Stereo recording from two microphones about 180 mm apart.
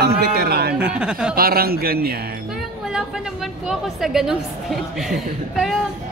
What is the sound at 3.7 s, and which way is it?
A woman's voice, 5° right (ahead or behind).